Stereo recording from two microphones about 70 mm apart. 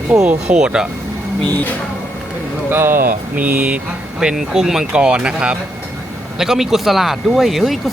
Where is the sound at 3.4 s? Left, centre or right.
Centre.